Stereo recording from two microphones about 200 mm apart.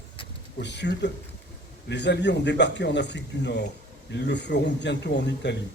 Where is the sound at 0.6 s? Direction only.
60° left (ahead or behind).